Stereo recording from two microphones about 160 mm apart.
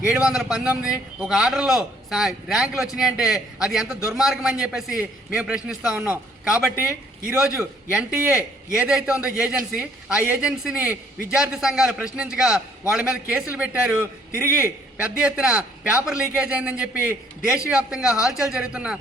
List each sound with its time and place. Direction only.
0.1 s a man's voice: 5° right (ahead or behind)